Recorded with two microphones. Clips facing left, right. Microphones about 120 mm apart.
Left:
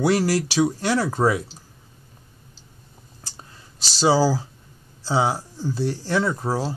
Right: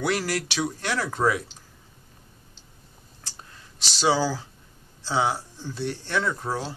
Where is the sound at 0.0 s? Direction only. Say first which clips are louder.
Left 6 dB; 35° left (ahead or behind).